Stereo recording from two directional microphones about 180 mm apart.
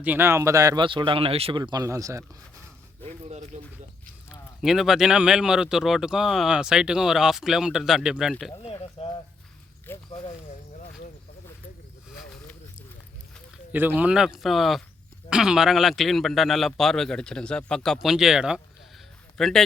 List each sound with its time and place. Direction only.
0.0 s speech: 10° right (ahead or behind)
3.2 s speech: 35° right (ahead or behind)
4.6 s speech: centre (ahead or behind)
8.6 s a sound: 30° left (ahead or behind)
9.9 s a sound: 10° left (ahead or behind)
13.7 s speech: 10° right (ahead or behind)